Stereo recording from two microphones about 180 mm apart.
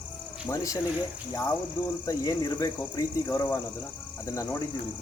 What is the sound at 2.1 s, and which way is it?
Speech, 20° left (ahead or behind).